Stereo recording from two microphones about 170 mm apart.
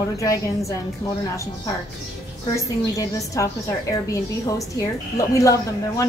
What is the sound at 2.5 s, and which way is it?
Speech, 20° left (ahead or behind).